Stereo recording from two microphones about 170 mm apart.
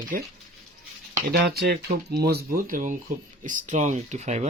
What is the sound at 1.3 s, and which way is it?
Speech, 70° right (ahead or behind).